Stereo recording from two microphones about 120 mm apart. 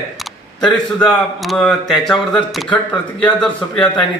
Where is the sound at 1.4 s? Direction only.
Centre (ahead or behind).